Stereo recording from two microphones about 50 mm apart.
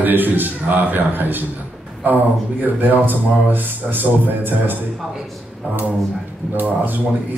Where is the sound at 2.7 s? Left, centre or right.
Right.